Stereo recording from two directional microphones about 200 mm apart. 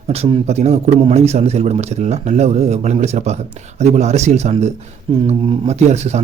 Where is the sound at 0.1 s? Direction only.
30° right (ahead or behind).